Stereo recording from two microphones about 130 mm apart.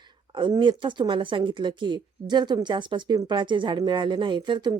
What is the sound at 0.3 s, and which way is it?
Speech, 35° right (ahead or behind).